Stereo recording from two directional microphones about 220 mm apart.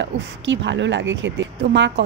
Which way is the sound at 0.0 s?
55° right (ahead or behind).